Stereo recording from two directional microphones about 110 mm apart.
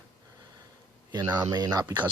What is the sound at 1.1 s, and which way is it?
Speech, 40° right (ahead or behind).